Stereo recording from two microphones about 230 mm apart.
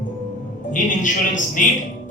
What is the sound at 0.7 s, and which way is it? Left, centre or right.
Music, left.